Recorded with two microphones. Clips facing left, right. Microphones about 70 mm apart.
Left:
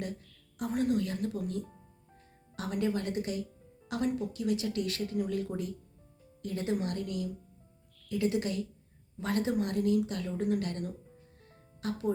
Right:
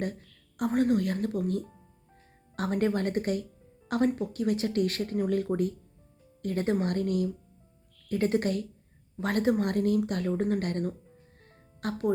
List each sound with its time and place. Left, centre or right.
0.0 s speech: right
11.4 s music: right